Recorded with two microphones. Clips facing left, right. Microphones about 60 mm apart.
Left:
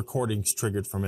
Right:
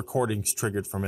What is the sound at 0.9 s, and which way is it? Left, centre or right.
Speech, right.